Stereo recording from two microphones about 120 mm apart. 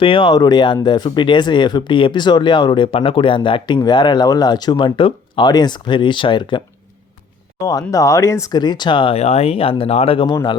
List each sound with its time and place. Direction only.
0.0 s speech: 45° left (ahead or behind)
7.6 s speech: 30° left (ahead or behind)
9.1 s speech: 60° left (ahead or behind)